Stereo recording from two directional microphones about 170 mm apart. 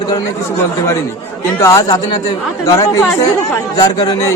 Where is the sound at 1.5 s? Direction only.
20° left (ahead or behind).